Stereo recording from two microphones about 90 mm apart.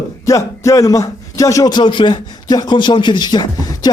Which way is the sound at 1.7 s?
55° left (ahead or behind).